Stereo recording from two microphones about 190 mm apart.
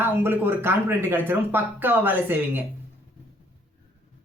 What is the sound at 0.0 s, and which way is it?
Speech, 10° right (ahead or behind).